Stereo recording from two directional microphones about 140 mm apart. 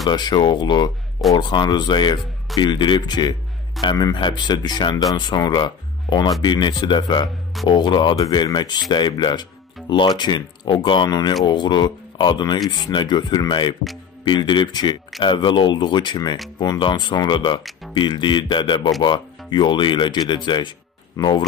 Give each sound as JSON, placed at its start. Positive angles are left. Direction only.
{"t": 0.0, "sound": "speech", "side_deg": 30}